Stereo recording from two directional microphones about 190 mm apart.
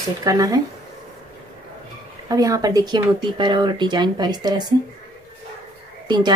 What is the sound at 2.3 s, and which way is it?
Speech, 20° right (ahead or behind).